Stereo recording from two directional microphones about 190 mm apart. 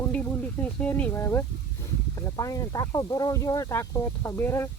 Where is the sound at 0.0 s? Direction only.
10° left (ahead or behind).